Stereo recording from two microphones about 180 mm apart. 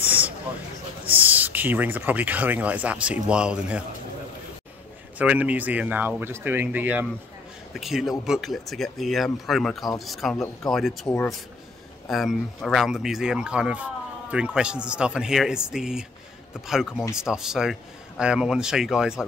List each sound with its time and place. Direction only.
0.0 s a sound: 10° right (ahead or behind)
1.0 s speech: 10° right (ahead or behind)
5.2 s speech: 10° right (ahead or behind)
10.3 s speech: 20° left (ahead or behind)
10.7 s speech: centre (ahead or behind)